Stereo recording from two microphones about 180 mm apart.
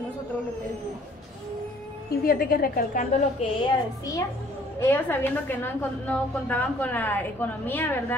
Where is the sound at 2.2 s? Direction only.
55° left (ahead or behind).